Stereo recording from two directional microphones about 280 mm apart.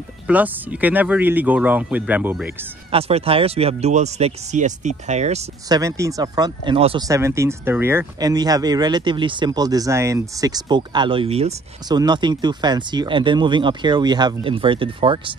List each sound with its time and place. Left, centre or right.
0.3 s speech: centre
2.9 s speech: right
5.8 s speech: centre